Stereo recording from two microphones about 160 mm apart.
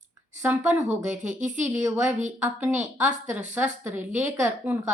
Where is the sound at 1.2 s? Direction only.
50° right (ahead or behind).